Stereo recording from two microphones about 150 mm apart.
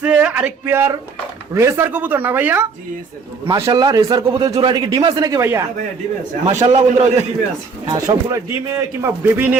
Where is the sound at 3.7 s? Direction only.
25° right (ahead or behind).